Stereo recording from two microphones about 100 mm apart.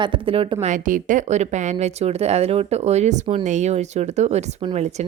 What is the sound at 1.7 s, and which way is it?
Speech, 90° right.